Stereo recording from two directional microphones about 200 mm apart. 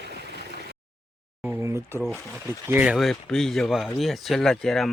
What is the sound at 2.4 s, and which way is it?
Speech, 10° right (ahead or behind).